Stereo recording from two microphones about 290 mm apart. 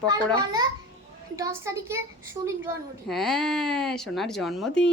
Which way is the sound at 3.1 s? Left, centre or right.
Centre.